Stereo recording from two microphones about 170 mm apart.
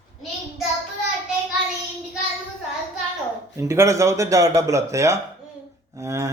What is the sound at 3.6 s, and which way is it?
A man's voice, 15° right (ahead or behind).